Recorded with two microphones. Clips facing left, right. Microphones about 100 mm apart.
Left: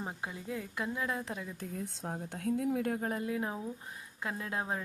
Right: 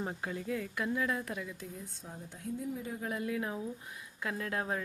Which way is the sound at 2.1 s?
65° left (ahead or behind).